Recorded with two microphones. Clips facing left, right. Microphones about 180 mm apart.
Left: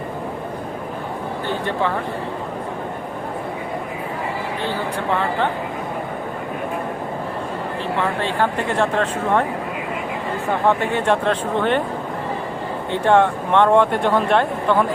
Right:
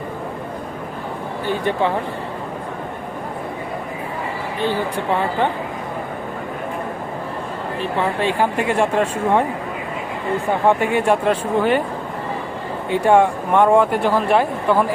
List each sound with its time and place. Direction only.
4.6 s speech: 15° right (ahead or behind)
7.8 s speech: 15° right (ahead or behind)
10.7 s speech: 10° right (ahead or behind)
12.9 s speech: 10° right (ahead or behind)